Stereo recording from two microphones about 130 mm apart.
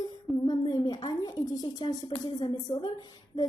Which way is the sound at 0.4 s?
30° left (ahead or behind).